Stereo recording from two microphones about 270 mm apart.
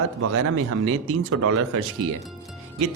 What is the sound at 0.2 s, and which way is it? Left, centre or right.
A woman's voice, right.